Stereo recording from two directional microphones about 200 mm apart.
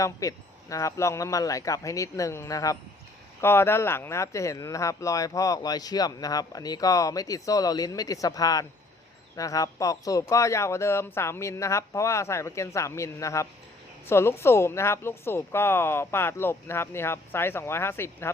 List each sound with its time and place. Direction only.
0.0 s speech: 15° left (ahead or behind)